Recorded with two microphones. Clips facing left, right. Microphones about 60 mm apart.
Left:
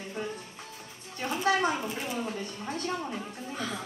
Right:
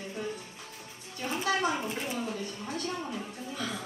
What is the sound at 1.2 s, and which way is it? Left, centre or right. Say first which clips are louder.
A woman's voice: left 3 dB; left.